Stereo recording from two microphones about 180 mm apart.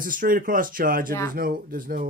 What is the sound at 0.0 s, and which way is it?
Speech, 50° right (ahead or behind).